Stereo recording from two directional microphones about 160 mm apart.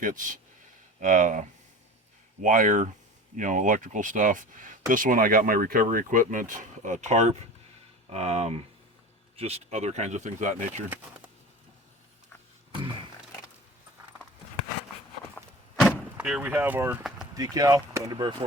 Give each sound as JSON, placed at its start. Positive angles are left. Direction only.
{"t": 0.0, "sound": "speech", "side_deg": -55}
{"t": 16.2, "sound": "speech", "side_deg": -5}